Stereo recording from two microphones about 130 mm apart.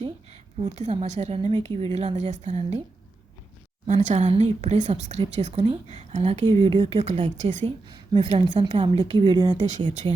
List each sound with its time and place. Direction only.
0.6 s a woman's voice: 60° right (ahead or behind)
2.3 s a woman's voice: 65° right (ahead or behind)
3.8 s a woman's voice: 65° right (ahead or behind)
6.4 s a woman's voice: 45° right (ahead or behind); by 7.7 s 60° right (ahead or behind)
7.9 s a woman's voice: 35° right (ahead or behind)
9.6 s speech: 70° right (ahead or behind)